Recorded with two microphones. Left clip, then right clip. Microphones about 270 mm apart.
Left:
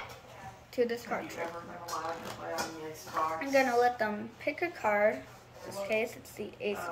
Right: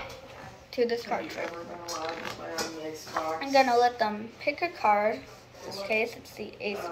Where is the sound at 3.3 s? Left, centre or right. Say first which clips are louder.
Right 6 dB; centre.